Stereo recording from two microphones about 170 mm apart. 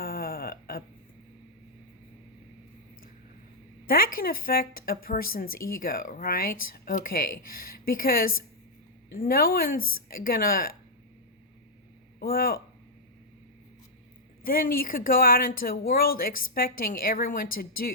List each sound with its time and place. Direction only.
0.0 s a sound: 60° left (ahead or behind)
3.8 s speech: 60° left (ahead or behind)
12.2 s speech: 60° left (ahead or behind)
14.4 s speech: 60° left (ahead or behind)